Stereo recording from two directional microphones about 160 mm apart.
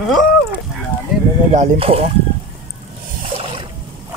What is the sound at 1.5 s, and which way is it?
Speech, 40° right (ahead or behind).